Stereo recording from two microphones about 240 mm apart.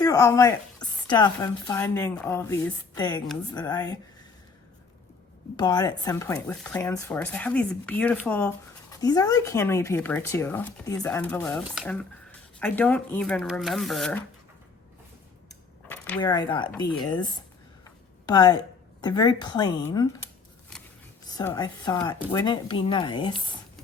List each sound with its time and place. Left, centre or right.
0.0 s speech: centre
5.5 s speech: centre
15.9 s a sound: centre
16.3 s speech: centre
16.9 s speech: centre
17.8 s a sound: centre
19.0 s speech: centre
21.2 s speech: centre